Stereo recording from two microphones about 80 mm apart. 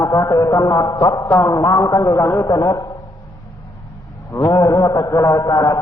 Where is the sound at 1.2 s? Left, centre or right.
Left.